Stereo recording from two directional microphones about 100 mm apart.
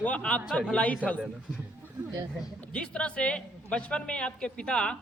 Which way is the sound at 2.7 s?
10° left (ahead or behind).